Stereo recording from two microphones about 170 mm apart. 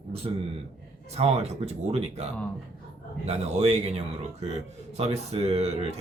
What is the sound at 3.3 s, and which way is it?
Speech, 40° right (ahead or behind).